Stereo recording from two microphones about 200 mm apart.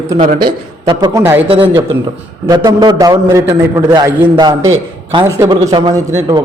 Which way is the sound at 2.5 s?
20° right (ahead or behind).